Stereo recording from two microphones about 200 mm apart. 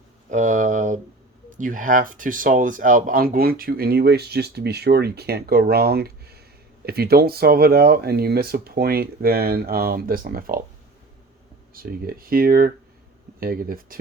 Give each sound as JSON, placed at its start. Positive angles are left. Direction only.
{"t": 0.3, "sound": "speech", "side_deg": -40}
{"t": 11.7, "sound": "speech", "side_deg": -45}